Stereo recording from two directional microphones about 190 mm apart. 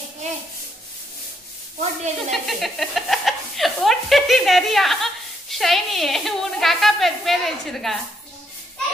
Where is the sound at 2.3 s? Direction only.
Centre (ahead or behind).